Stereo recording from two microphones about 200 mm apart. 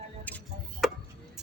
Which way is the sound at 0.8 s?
Centre (ahead or behind).